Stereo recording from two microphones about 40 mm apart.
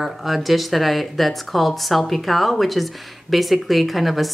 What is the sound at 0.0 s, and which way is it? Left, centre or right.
A woman's voice, centre.